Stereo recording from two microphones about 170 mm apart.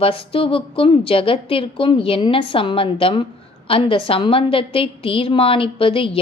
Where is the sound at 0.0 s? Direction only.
30° left (ahead or behind).